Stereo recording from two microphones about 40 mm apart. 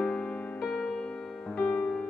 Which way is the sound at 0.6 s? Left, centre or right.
Centre.